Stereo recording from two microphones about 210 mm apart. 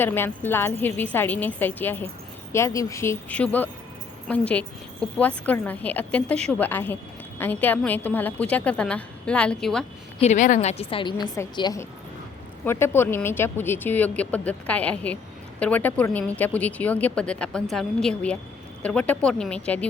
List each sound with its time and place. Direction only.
0.0 s speech: 10° left (ahead or behind)
10.2 s a woman's voice: 35° left (ahead or behind); by 19.9 s 5° left (ahead or behind)